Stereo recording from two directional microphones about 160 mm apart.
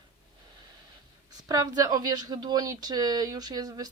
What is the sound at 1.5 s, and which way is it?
A woman's voice, 25° right (ahead or behind).